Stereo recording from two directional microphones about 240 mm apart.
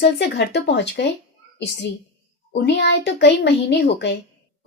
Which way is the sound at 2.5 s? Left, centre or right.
Left.